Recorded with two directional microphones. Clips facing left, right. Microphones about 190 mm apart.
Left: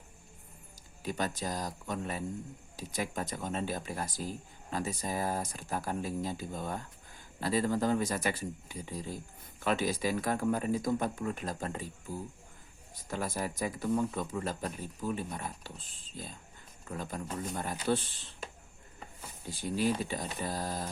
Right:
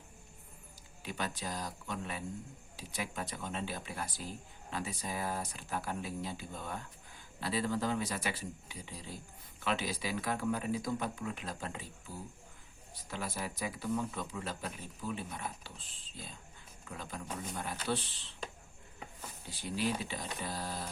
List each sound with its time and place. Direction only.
1.0 s speech: 45° left (ahead or behind)
19.5 s speech: 45° left (ahead or behind)